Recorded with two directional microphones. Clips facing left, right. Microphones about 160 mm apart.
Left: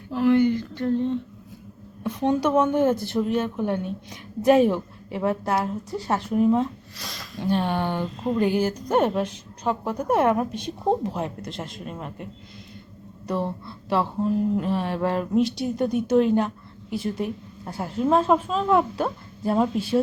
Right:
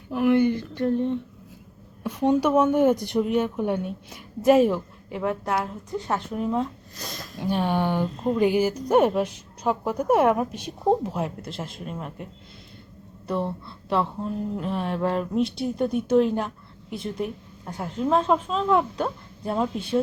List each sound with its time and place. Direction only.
0.1 s a woman's voice: 15° right (ahead or behind); by 6.7 s 5° left (ahead or behind)
6.9 s speech: 45° right (ahead or behind)
7.3 s a woman's voice: 10° right (ahead or behind)
13.2 s a sound: centre (ahead or behind)